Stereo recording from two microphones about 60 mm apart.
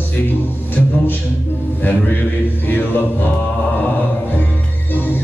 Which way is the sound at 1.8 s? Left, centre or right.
Left.